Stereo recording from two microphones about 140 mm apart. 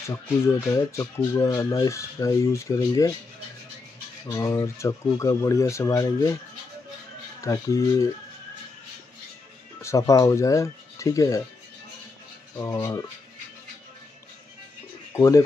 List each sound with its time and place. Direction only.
0.1 s speech: 20° left (ahead or behind)
4.3 s speech: 20° left (ahead or behind)
7.4 s speech: 20° left (ahead or behind)
9.8 s speech: 20° left (ahead or behind)
12.5 s speech: 20° left (ahead or behind)
15.1 s speech: 25° left (ahead or behind)